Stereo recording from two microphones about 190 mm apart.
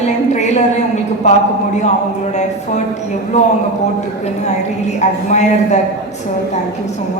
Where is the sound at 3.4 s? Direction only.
35° left (ahead or behind).